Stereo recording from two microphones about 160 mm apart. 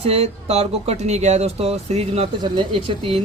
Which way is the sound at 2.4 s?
30° right (ahead or behind).